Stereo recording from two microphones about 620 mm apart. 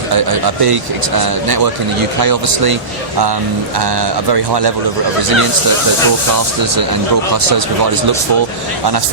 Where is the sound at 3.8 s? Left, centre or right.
Right.